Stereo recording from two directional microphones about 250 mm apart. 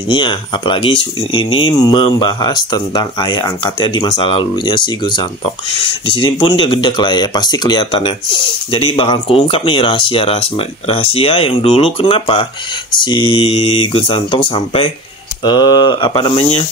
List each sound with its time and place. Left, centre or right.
0.1 s speech: centre